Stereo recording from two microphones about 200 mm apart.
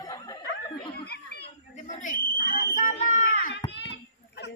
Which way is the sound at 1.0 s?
55° left (ahead or behind).